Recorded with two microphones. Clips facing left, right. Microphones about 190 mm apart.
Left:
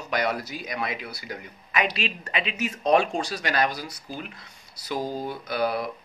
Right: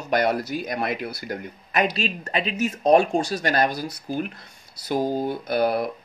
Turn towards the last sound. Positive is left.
turn(degrees=-55)  # may be behind; listen again after turning